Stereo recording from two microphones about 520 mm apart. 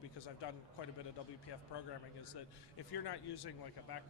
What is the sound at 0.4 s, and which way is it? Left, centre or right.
Speech, left.